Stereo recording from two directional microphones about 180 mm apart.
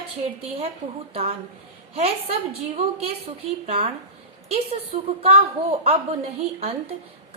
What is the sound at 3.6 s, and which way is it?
A woman's voice, 35° right (ahead or behind).